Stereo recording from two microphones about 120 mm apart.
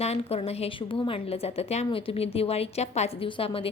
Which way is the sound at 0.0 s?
60° left (ahead or behind).